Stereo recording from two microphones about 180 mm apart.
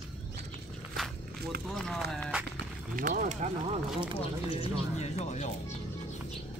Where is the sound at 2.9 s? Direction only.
50° right (ahead or behind).